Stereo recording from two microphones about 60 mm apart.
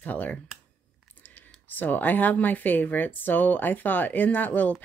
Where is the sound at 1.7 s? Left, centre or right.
Left.